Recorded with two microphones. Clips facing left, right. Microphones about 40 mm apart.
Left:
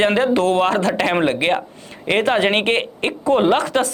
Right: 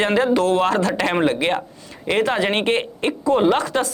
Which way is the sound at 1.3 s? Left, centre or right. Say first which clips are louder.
Left 2 dB; left.